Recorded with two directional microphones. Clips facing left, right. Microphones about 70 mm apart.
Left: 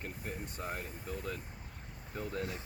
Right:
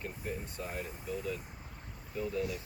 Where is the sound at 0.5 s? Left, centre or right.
Left.